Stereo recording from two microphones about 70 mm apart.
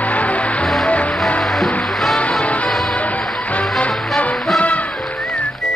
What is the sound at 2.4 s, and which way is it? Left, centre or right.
Music, centre.